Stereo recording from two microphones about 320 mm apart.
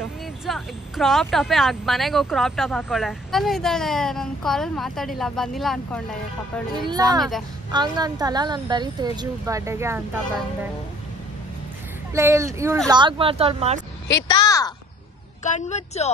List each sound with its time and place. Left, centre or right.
0.5 s speech: centre
6.9 s speech: centre
7.2 s speech: centre
7.7 s speech: centre
12.1 s speech: centre
14.0 s a sound: centre
15.4 s speech: left